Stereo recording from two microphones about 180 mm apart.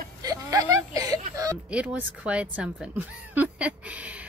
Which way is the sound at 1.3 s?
20° right (ahead or behind).